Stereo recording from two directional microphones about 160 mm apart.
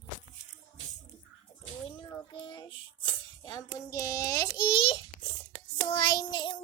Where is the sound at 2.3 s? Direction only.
30° left (ahead or behind).